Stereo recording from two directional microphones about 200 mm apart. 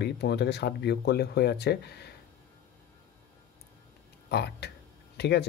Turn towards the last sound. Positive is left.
turn(degrees=55)  # may be behind; listen again after turning